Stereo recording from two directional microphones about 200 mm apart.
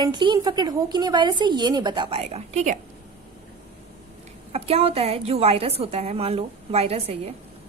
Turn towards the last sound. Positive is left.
turn(degrees=-30)  # may be behind; listen again after turning